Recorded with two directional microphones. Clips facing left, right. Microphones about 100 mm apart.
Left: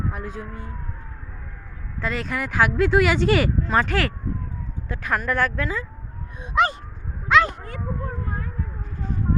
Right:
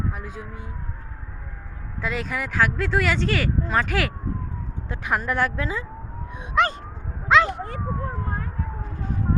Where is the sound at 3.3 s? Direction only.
15° left (ahead or behind).